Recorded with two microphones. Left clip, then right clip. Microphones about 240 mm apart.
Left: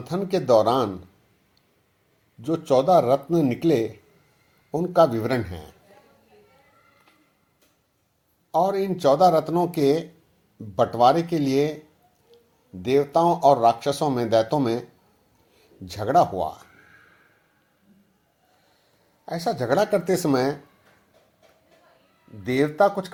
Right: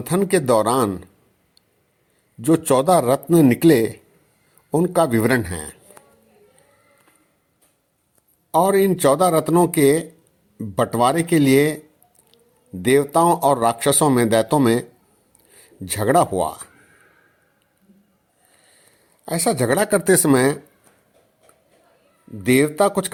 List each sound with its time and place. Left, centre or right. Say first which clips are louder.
0.0 s speech: right 6 dB; right
2.4 s speech: right 4 dB; right
8.5 s speech: right 6 dB; right
12.8 s speech: right 4 dB; right
19.2 s speech: right 6 dB; right
22.4 s speech: right 3 dB; right